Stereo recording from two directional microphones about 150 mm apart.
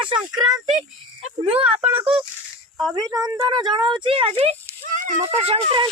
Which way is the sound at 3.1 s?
25° right (ahead or behind).